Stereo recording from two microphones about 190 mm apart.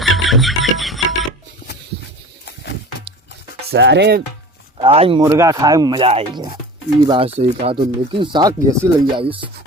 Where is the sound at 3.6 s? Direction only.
65° right (ahead or behind).